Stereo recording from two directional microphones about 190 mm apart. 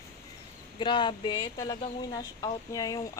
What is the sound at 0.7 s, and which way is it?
Speech, 25° left (ahead or behind).